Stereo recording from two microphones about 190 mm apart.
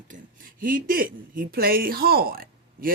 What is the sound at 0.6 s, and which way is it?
Speech, 50° right (ahead or behind).